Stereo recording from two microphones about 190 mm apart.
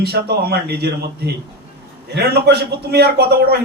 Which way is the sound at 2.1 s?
60° right (ahead or behind).